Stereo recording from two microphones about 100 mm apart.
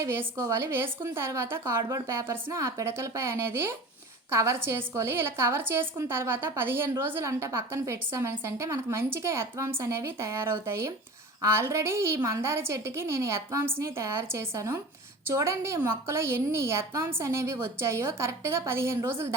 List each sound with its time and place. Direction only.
0.0 s a woman's voice: 25° right (ahead or behind)